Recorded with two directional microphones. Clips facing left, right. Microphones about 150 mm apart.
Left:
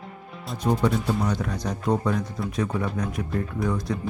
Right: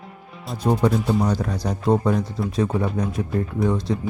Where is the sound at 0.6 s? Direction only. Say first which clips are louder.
Right 3 dB; 35° right (ahead or behind).